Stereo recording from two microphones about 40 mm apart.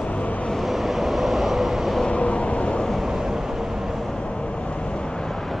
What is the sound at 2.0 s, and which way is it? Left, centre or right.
Vehicle, left.